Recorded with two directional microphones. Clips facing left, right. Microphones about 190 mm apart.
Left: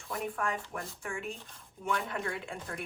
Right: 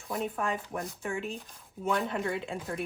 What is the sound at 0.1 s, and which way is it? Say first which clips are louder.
Speech: right 3 dB; 20° right (ahead or behind).